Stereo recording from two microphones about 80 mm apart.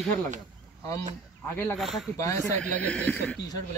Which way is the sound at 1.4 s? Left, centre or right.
Left.